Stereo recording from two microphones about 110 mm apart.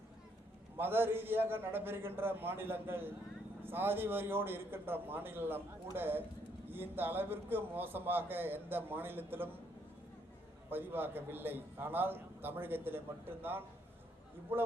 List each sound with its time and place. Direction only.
0.8 s a man's voice: 20° right (ahead or behind)
10.7 s a man's voice: 20° right (ahead or behind)